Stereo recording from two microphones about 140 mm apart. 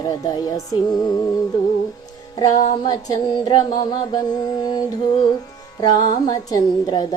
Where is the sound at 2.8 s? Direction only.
30° left (ahead or behind).